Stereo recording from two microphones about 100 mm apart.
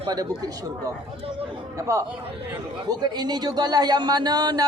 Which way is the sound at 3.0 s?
45° right (ahead or behind).